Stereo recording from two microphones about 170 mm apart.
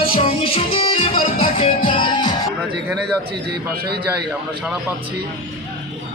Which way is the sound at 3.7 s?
65° right (ahead or behind).